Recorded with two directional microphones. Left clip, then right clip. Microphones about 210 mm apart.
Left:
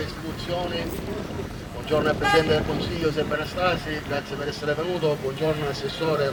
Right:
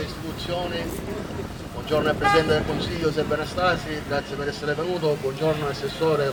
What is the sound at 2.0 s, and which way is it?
Speech, centre (ahead or behind).